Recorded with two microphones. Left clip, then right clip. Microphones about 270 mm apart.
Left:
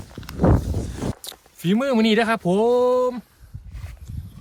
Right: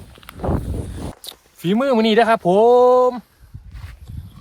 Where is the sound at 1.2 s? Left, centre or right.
Centre.